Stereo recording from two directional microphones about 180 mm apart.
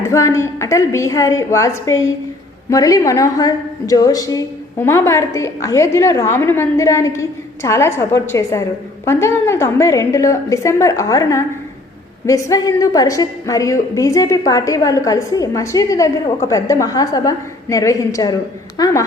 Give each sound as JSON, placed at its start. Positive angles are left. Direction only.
{"t": 0.0, "sound": "a woman's voice", "side_deg": 20}